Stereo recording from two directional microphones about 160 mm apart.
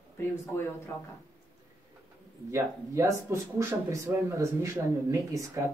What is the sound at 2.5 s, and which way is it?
Speech, 20° right (ahead or behind).